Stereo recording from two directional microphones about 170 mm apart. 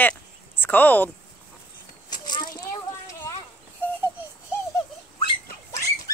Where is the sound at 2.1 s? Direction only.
25° left (ahead or behind).